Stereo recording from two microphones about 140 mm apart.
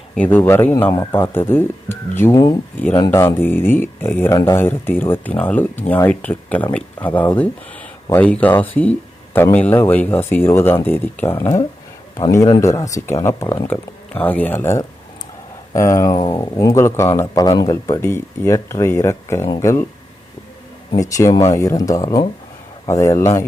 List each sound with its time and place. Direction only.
0.2 s speech: 15° left (ahead or behind)
20.9 s speech: 25° left (ahead or behind)